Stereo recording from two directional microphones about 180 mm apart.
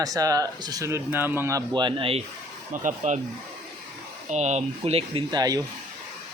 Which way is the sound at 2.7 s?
45° right (ahead or behind).